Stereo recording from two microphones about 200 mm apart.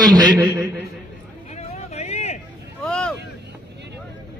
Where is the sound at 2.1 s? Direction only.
35° left (ahead or behind).